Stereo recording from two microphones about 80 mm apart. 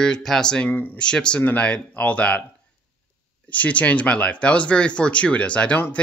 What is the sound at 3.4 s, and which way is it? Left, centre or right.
Speech, centre.